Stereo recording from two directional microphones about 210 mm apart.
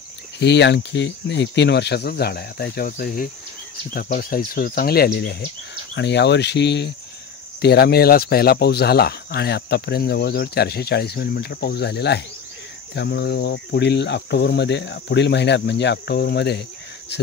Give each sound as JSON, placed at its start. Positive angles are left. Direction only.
{"t": 0.4, "sound": "speech", "side_deg": 55}
{"t": 5.9, "sound": "cricket", "side_deg": 55}
{"t": 7.6, "sound": "speech", "side_deg": 50}
{"t": 12.9, "sound": "cricket", "side_deg": 55}